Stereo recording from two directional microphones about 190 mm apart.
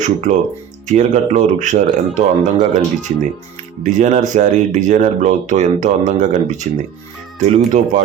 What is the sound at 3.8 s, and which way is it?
Speech, 40° right (ahead or behind).